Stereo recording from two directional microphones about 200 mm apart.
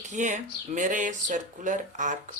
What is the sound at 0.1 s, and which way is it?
Speech, 35° right (ahead or behind).